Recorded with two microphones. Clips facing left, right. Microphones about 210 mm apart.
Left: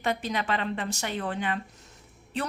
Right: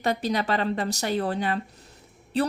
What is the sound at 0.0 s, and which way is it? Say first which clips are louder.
A woman's voice: right 4 dB; 35° right (ahead or behind).